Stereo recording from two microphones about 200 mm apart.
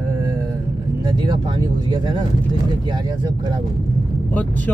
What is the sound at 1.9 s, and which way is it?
Speech, 20° right (ahead or behind).